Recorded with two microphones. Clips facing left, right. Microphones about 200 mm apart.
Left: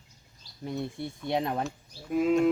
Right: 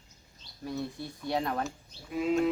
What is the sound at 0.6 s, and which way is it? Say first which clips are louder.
Speech: left 2 dB; 20° left (ahead or behind).